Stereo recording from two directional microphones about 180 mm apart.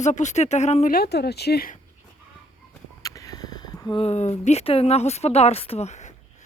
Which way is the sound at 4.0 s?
35° left (ahead or behind).